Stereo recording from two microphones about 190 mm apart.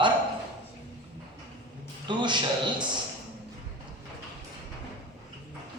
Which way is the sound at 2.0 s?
25° right (ahead or behind).